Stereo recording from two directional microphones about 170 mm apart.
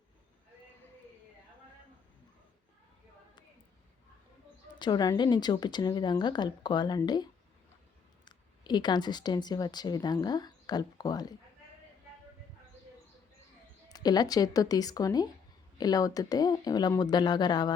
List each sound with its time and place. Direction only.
4.7 s a woman's voice: 25° left (ahead or behind)
13.8 s a woman's voice: 20° left (ahead or behind)